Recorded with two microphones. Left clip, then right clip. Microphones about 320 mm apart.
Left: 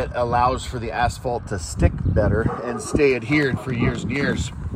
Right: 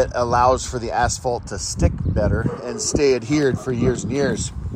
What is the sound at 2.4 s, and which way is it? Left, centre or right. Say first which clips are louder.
Speech: left 1 dB; centre.